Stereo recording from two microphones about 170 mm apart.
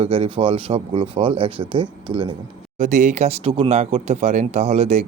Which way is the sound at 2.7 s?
45° right (ahead or behind).